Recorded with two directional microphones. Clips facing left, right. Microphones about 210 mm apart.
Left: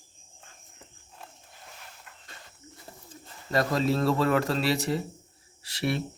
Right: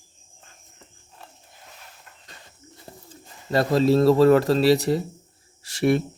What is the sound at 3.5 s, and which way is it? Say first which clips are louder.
Speech: right 6 dB; 30° right (ahead or behind).